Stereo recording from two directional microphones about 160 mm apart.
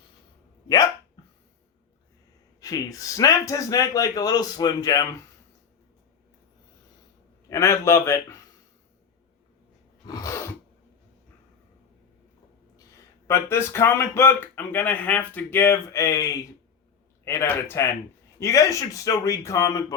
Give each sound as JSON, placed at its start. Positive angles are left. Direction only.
{"t": 2.6, "sound": "speech", "side_deg": 20}
{"t": 7.5, "sound": "speech", "side_deg": 15}
{"t": 10.1, "sound": "sneeze", "side_deg": 20}
{"t": 13.2, "sound": "speech", "side_deg": 15}